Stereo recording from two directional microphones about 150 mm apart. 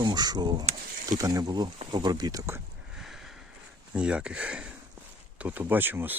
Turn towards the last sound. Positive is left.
turn(degrees=-15)  # may be behind; listen again after turning